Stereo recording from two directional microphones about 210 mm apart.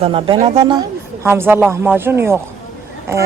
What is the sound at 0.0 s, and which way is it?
Speech, 25° right (ahead or behind).